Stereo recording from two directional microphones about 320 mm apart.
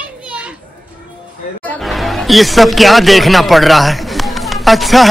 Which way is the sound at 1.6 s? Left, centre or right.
Centre.